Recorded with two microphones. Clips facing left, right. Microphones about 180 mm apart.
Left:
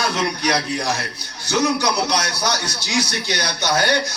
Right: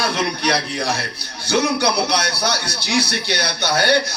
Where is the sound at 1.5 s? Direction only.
60° right (ahead or behind).